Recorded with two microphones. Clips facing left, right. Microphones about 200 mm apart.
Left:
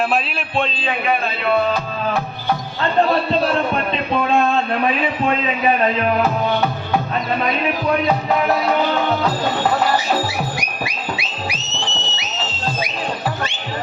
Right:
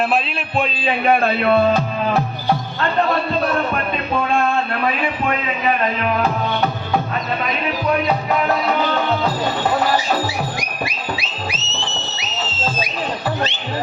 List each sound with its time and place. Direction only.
0.1 s a man's voice: 5° right (ahead or behind)
11.4 s music: 15° left (ahead or behind)